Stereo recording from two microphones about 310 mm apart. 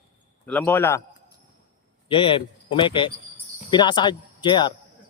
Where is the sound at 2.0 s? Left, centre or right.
Centre.